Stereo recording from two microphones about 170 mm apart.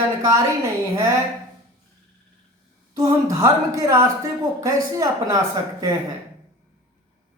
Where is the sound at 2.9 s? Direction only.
20° right (ahead or behind).